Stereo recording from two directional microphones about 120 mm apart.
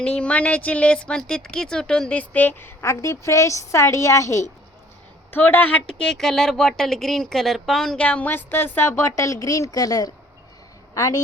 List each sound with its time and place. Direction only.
0.0 s a woman's voice: 10° left (ahead or behind); by 4.4 s 25° left (ahead or behind)
5.3 s a woman's voice: 15° left (ahead or behind)